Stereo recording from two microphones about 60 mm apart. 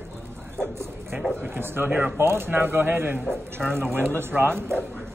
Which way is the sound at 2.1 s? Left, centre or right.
Right.